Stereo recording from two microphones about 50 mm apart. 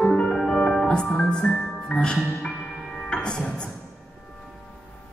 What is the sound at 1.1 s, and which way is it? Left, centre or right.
Speech, centre.